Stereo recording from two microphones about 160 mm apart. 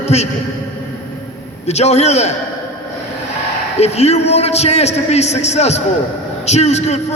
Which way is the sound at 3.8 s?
40° left (ahead or behind).